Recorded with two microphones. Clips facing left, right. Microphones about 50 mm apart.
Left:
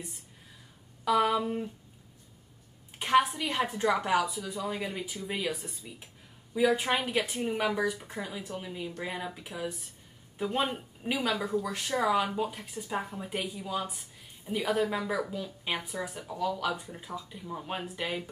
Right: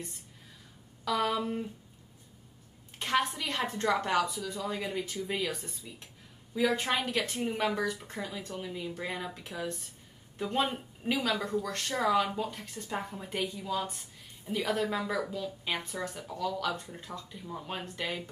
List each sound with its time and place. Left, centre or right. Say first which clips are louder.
1.0 s speech: left 4 dB; centre
3.0 s speech: left 5 dB; centre